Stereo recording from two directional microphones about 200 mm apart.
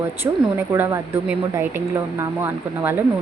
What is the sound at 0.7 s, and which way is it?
Speech, 10° right (ahead or behind).